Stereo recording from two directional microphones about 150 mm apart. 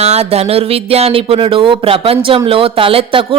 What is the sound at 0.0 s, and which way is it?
Speech, 45° right (ahead or behind).